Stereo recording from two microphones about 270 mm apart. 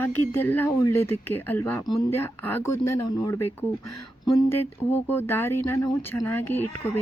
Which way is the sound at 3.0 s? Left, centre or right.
Centre.